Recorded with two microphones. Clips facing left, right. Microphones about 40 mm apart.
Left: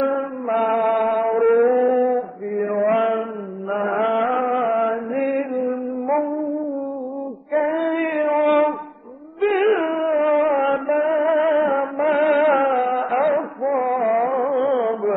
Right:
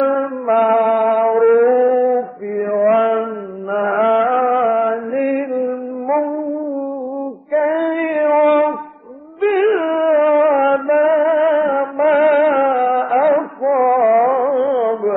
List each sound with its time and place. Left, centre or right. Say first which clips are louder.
0.0 s a sound: right 5 dB; centre
0.5 s music: right 6 dB; centre
3.7 s mantra: right 5 dB; centre
4.0 s music: right 7 dB; centre
7.6 s female singing: right 4 dB; centre
9.4 s music: right 3 dB; centre